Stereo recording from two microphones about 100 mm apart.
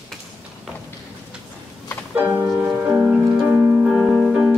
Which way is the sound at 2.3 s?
20° right (ahead or behind).